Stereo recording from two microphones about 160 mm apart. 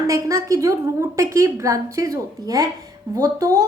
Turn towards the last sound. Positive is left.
turn(degrees=-20)  # may be behind; listen again after turning